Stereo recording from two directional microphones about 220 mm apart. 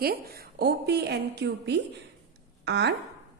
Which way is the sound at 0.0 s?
45° right (ahead or behind).